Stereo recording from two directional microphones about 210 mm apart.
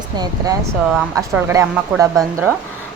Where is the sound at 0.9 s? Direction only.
5° right (ahead or behind).